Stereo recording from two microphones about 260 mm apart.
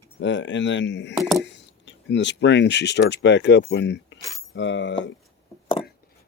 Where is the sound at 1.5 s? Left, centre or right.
Left.